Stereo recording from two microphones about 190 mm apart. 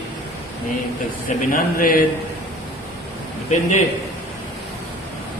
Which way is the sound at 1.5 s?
50° left (ahead or behind).